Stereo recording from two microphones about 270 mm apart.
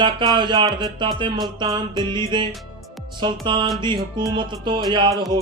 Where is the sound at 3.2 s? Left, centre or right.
Centre.